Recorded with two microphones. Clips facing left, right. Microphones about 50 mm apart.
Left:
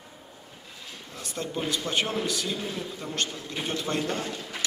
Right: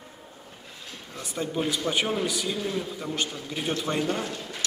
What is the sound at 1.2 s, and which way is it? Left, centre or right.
A man's voice, centre.